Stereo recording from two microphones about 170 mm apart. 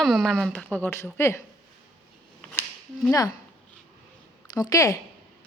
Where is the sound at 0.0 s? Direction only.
Centre (ahead or behind).